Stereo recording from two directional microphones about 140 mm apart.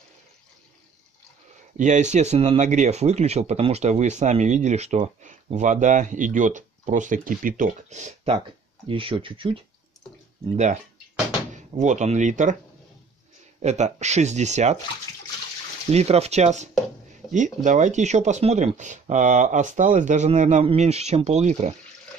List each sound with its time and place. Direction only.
1.8 s speech: 60° right (ahead or behind)
2.6 s speech: 60° right (ahead or behind)
8.8 s speech: 40° right (ahead or behind)
10.5 s speech: 55° right (ahead or behind)
11.8 s speech: 55° right (ahead or behind)
13.6 s speech: 55° right (ahead or behind)
15.9 s speech: 50° right (ahead or behind)